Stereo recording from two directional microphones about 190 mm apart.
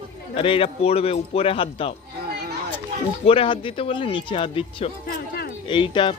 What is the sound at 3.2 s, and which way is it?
Speech, 30° left (ahead or behind).